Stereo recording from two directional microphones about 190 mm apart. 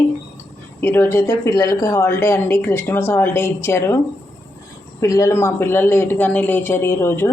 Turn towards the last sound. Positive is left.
turn(degrees=15)  # may be behind; listen again after turning